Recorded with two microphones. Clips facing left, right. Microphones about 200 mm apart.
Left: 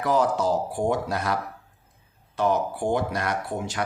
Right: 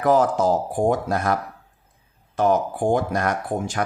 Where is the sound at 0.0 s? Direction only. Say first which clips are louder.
Right 4 dB; 50° right (ahead or behind).